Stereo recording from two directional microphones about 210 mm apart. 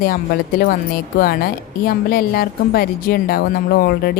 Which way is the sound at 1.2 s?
45° left (ahead or behind).